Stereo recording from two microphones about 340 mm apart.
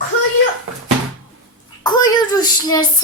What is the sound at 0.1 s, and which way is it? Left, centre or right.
Door, left.